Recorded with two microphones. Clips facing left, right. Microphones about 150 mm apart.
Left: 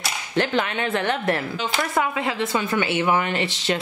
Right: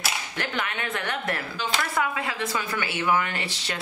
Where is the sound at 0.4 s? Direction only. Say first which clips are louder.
Left 9 dB; 30° left (ahead or behind).